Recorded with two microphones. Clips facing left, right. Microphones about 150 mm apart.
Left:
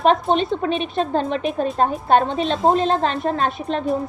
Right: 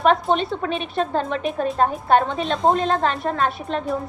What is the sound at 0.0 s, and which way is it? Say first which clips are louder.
A child's voice: left 1 dB; 25° left (ahead or behind).